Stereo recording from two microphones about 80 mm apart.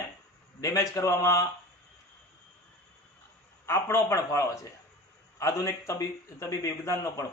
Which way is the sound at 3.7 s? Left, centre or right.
Left.